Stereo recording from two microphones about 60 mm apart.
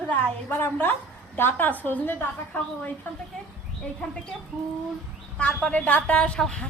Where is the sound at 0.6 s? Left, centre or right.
Left.